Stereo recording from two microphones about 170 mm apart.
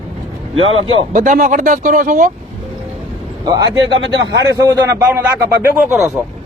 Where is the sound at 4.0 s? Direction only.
90° right.